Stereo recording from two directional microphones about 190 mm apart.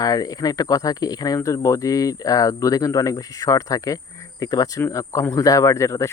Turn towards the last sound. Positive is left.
turn(degrees=15)  # may be behind; listen again after turning